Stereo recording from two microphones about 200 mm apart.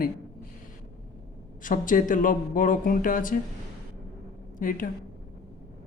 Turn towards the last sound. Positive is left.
turn(degrees=45)  # may be behind; listen again after turning